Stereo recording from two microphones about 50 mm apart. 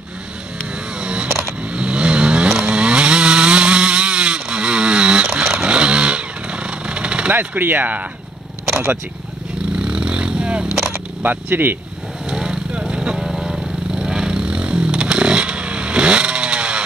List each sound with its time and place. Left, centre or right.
0.9 s a sound: centre
1.6 s vehicle: right
2.6 s chainsaw: centre
5.2 s dog: centre
5.7 s motorcycle: centre
7.3 s speech: right
9.8 s a sound: centre
11.2 s speech: right
12.3 s vehicle: centre
13.2 s a sound: centre